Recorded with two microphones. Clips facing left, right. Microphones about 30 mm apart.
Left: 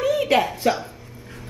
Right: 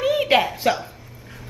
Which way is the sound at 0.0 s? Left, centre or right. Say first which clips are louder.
Right 1 dB; right.